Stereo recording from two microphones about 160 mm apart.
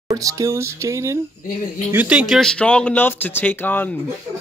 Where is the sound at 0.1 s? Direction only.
20° right (ahead or behind).